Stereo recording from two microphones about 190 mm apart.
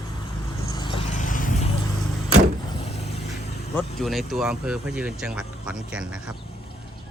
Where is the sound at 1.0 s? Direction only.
40° left (ahead or behind).